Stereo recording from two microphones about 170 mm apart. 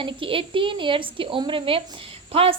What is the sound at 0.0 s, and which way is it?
Speech, 30° right (ahead or behind).